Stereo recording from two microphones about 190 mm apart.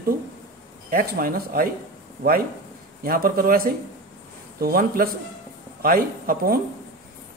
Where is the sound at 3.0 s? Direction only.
50° right (ahead or behind).